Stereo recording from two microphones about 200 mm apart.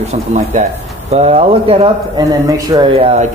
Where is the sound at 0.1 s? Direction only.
35° right (ahead or behind).